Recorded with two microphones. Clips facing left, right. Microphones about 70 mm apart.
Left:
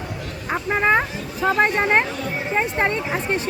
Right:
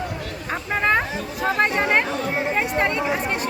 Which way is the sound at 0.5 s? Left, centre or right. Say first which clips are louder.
Left 2 dB; centre.